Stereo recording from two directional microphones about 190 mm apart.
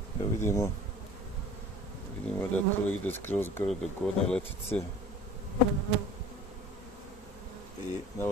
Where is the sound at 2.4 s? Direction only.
10° left (ahead or behind).